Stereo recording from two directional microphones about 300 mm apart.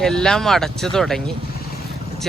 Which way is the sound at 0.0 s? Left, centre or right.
Centre.